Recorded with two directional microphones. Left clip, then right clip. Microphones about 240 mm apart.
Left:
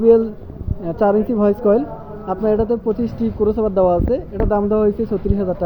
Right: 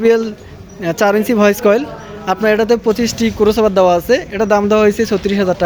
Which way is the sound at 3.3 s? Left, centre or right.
Right.